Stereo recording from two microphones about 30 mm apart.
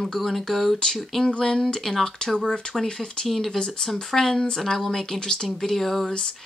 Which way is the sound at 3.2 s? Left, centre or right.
Centre.